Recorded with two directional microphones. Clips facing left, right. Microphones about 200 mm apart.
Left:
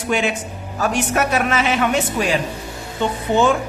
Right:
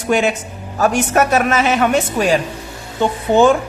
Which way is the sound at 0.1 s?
45° right (ahead or behind).